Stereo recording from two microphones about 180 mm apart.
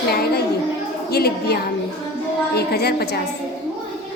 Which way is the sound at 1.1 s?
60° left (ahead or behind).